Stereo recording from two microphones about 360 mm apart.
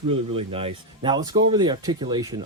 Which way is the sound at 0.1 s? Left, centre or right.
Centre.